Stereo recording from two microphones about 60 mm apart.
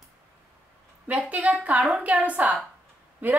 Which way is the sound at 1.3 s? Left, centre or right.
Right.